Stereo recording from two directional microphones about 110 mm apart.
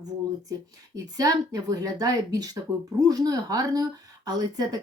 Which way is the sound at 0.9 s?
35° right (ahead or behind).